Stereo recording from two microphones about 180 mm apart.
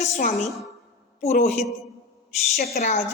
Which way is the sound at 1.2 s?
40° left (ahead or behind).